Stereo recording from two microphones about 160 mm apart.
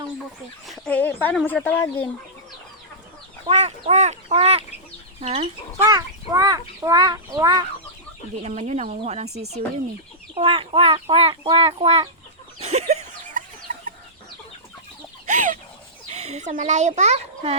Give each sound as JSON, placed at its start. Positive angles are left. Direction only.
{"t": 0.7, "sound": "speech", "side_deg": 10}
{"t": 3.4, "sound": "a child's voice", "side_deg": -35}
{"t": 5.8, "sound": "a child's voice", "side_deg": -25}
{"t": 8.4, "sound": "speech", "side_deg": -45}
{"t": 10.3, "sound": "a child's voice", "side_deg": -35}
{"t": 12.5, "sound": "chicken", "side_deg": -40}
{"t": 15.3, "sound": "chicken", "side_deg": -50}
{"t": 16.0, "sound": "speech", "side_deg": -45}